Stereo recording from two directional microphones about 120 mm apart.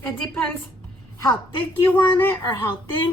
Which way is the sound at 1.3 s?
40° left (ahead or behind).